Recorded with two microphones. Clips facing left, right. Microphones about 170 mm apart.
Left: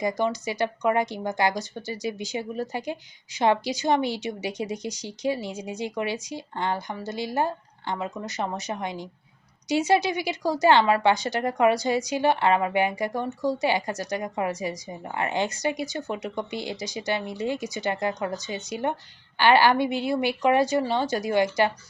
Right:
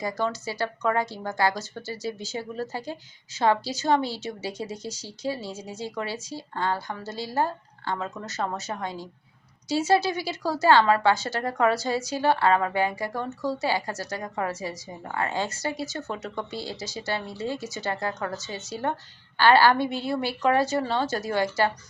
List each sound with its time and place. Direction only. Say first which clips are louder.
0.0 s a woman's voice: left 3 dB; 15° left (ahead or behind)